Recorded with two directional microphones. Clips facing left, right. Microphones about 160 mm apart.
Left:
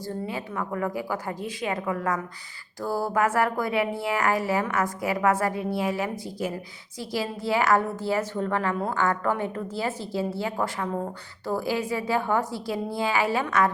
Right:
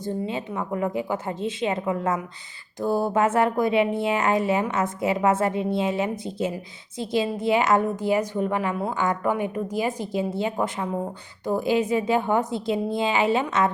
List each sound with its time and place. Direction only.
0.0 s a woman's voice: 20° right (ahead or behind)